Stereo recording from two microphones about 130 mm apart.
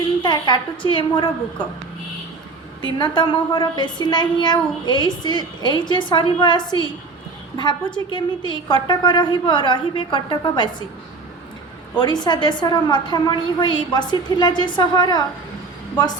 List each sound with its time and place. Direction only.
0.2 s a woman's voice: 35° left (ahead or behind)
3.0 s a woman's voice: 35° left (ahead or behind)
11.9 s a woman's voice: 35° left (ahead or behind)